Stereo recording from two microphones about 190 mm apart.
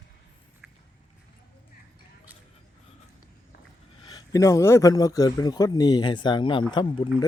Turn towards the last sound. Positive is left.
turn(degrees=25)  # may be behind; listen again after turning